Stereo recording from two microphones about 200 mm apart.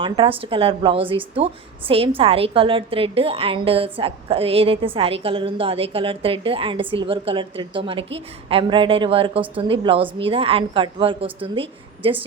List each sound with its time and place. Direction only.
0.0 s a woman's voice: 25° right (ahead or behind)